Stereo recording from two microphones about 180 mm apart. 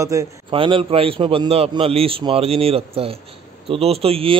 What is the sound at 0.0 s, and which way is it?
Speech, 15° right (ahead or behind).